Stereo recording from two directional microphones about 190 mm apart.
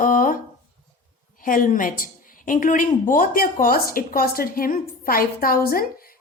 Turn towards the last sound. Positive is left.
turn(degrees=50)  # may be behind; listen again after turning